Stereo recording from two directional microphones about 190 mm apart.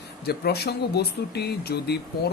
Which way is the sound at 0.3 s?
55° left (ahead or behind).